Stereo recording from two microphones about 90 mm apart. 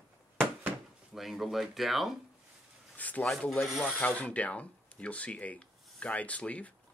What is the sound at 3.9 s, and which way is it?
Speech, 15° left (ahead or behind).